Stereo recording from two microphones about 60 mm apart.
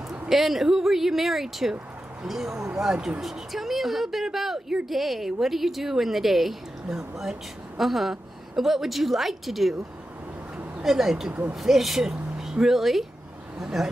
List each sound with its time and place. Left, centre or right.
0.3 s speech: centre
10.8 s speech: centre